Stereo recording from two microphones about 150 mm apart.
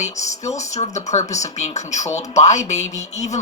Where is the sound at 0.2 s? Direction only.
50° left (ahead or behind).